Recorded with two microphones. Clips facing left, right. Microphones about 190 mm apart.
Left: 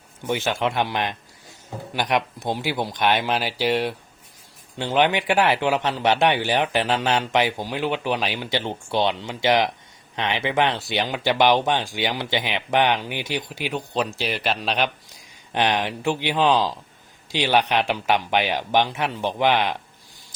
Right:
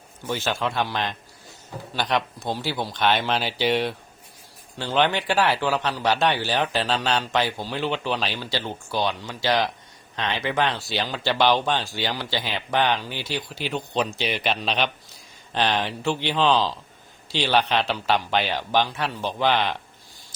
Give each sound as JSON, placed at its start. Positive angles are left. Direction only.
{"t": 0.3, "sound": "speech", "side_deg": 15}
{"t": 4.8, "sound": "speech", "side_deg": 15}